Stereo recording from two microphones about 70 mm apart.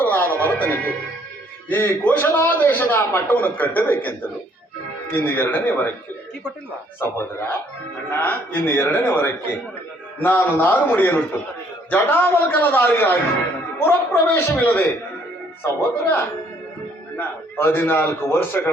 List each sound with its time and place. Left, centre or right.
0.0 s music: left
1.7 s a man's voice: left
5.1 s a man's voice: left
7.0 s a man's voice: left